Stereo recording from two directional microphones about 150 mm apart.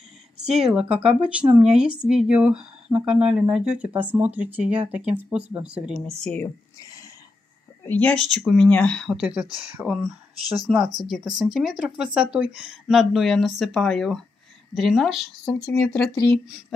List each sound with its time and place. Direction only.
0.5 s speech: 5° right (ahead or behind)
6.1 s speech: 10° left (ahead or behind)
6.8 s a sound: 25° left (ahead or behind)
7.8 s speech: 10° left (ahead or behind)
15.4 s speech: 15° left (ahead or behind)
16.3 s speech: 5° right (ahead or behind)